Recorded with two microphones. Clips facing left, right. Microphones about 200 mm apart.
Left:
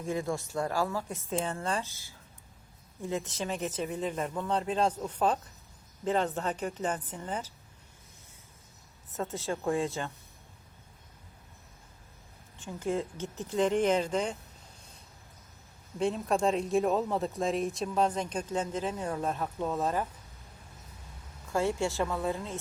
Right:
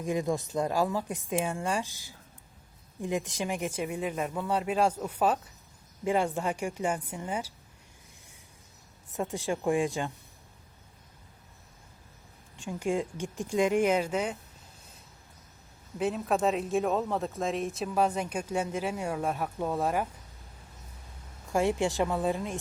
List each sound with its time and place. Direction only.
0.0 s speech: 15° right (ahead or behind)
9.1 s speech: 15° right (ahead or behind)
12.5 s speech: 15° right (ahead or behind)
16.0 s speech: 5° right (ahead or behind)
21.5 s speech: 15° right (ahead or behind)